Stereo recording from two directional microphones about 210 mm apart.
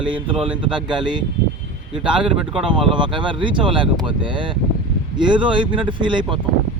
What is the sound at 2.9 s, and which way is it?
Speech, 25° right (ahead or behind).